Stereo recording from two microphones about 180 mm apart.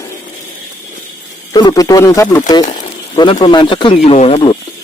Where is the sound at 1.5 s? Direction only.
20° left (ahead or behind).